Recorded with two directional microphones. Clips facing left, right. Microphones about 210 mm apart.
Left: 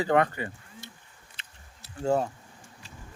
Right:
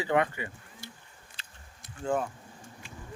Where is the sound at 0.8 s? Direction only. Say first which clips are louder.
Right 5 dB; 20° left (ahead or behind).